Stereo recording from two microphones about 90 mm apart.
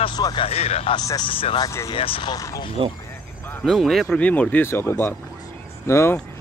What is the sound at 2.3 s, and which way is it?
Speech, 40° left (ahead or behind).